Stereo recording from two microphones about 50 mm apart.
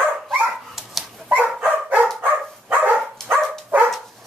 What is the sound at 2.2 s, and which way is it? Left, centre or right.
Dog, right.